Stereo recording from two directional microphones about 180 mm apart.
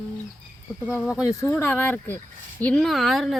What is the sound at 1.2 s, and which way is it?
Speech, 15° left (ahead or behind).